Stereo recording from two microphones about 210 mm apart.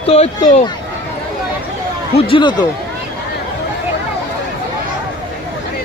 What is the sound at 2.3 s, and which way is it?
Speech, 20° left (ahead or behind).